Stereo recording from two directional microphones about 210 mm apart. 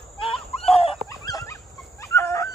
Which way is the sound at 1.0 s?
15° left (ahead or behind).